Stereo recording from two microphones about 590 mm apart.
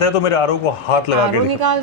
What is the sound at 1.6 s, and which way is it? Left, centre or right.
Music, right.